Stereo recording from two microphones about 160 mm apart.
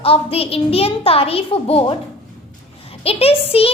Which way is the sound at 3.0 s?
35° left (ahead or behind).